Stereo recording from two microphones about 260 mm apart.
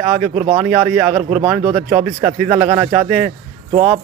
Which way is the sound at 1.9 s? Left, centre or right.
Centre.